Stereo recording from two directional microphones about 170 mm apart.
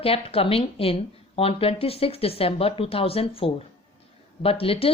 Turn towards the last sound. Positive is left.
turn(degrees=35)  # may be behind; listen again after turning